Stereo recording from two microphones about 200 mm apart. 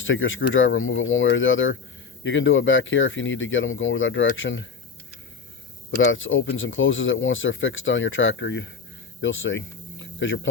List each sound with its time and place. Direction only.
0.0 s speech: 75° left (ahead or behind)
5.9 s speech: 75° left (ahead or behind)